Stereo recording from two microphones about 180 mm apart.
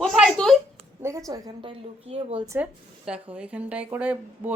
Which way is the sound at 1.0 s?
15° right (ahead or behind).